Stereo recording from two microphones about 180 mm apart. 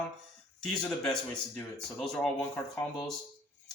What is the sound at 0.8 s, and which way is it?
Speech, 5° left (ahead or behind).